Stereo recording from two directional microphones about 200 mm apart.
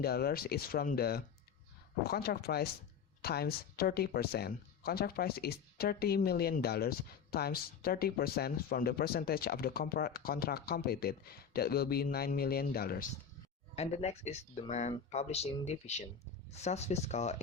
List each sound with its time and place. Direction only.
0.0 s speech: 50° left (ahead or behind)
13.7 s speech: 30° left (ahead or behind)